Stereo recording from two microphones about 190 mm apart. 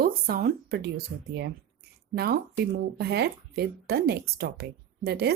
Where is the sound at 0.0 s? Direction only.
50° right (ahead or behind).